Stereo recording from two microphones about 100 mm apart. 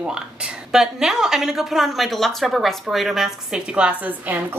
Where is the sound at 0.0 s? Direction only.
10° right (ahead or behind).